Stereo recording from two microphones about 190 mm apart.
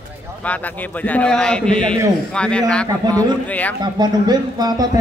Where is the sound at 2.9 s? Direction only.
20° right (ahead or behind).